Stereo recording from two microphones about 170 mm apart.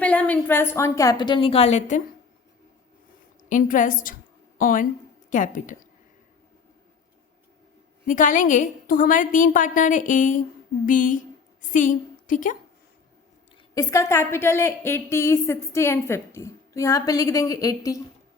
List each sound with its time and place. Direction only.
0.0 s a woman's voice: 10° left (ahead or behind); by 2.0 s 40° left (ahead or behind)
3.5 s a woman's voice: 50° left (ahead or behind)
8.0 s a woman's voice: 50° left (ahead or behind)
13.7 s a woman's voice: 20° left (ahead or behind)